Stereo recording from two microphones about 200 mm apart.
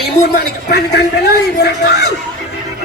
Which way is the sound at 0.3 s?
55° left (ahead or behind).